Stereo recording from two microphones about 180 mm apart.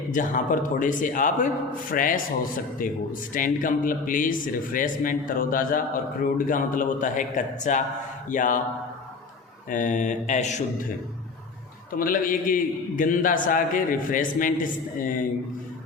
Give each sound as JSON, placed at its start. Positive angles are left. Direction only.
{"t": 0.1, "sound": "a man's voice", "side_deg": 45}
{"t": 9.6, "sound": "a man's voice", "side_deg": 45}